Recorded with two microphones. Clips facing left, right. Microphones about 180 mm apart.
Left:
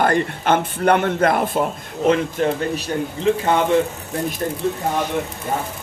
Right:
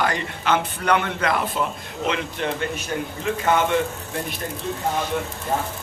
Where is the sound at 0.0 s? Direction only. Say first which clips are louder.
Left 6 dB; 50° left (ahead or behind).